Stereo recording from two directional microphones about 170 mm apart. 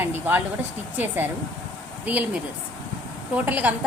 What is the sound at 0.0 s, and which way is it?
A woman's voice, 10° right (ahead or behind).